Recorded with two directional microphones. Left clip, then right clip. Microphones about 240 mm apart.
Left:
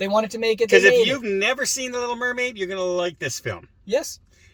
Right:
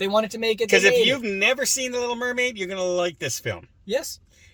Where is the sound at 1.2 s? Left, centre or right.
Centre.